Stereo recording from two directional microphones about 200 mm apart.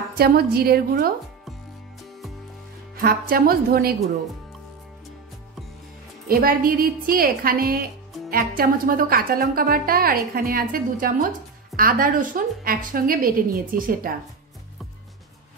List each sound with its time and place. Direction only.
0.1 s a woman's voice: 50° right (ahead or behind)
3.0 s a woman's voice: 45° right (ahead or behind)
6.2 s a woman's voice: 45° right (ahead or behind)